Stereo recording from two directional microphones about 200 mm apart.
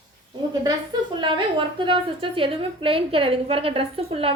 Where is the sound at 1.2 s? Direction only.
25° right (ahead or behind).